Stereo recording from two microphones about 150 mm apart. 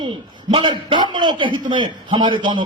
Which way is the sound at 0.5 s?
35° right (ahead or behind).